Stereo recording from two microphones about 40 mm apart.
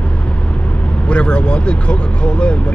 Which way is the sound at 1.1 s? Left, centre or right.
Left.